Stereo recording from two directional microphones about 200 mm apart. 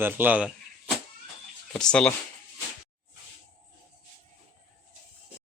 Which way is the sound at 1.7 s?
5° left (ahead or behind).